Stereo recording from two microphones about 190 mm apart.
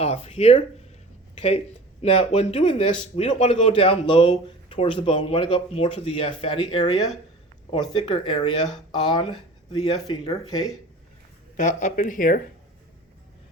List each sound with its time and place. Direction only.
0.0 s speech: 35° left (ahead or behind)
10.2 s speech: 20° left (ahead or behind)
11.5 s speech: 40° left (ahead or behind)